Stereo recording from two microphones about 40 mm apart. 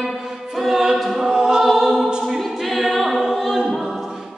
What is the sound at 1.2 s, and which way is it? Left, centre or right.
Choir, centre.